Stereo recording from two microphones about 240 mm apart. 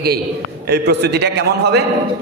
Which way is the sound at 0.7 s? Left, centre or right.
Right.